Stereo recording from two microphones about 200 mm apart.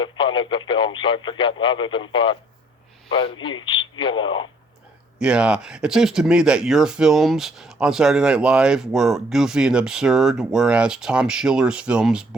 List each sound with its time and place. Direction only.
0.0 s speech: 25° left (ahead or behind)
3.4 s speech: 25° left (ahead or behind)
5.2 s speech: 5° right (ahead or behind)